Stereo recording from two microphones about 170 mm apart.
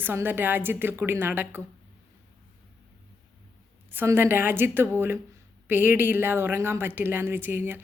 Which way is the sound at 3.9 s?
15° right (ahead or behind).